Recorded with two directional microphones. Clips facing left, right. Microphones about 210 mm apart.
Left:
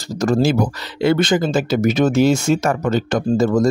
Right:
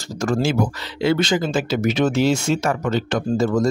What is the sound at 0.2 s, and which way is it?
Speech, 40° left (ahead or behind).